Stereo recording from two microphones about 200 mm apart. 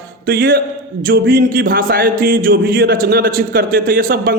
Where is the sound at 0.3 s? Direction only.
50° right (ahead or behind).